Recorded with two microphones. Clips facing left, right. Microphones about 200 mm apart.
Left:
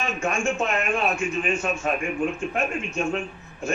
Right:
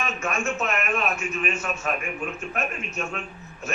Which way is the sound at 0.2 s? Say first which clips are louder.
Left 4 dB; 30° left (ahead or behind).